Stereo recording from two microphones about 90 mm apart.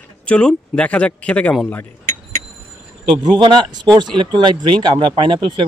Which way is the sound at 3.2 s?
55° right (ahead or behind).